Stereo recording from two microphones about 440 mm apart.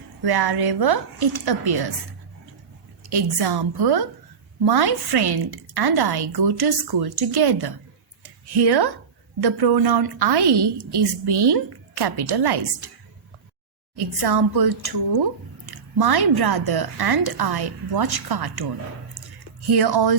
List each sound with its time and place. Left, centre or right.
0.2 s a woman's voice: right
3.1 s a woman's voice: right
8.2 s a sound: right
9.4 s a woman's voice: right
13.9 s a woman's voice: right
19.7 s a woman's voice: right